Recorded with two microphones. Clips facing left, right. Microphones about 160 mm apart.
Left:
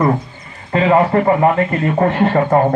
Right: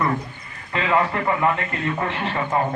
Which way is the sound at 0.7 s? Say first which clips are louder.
Left 8 dB; 40° left (ahead or behind).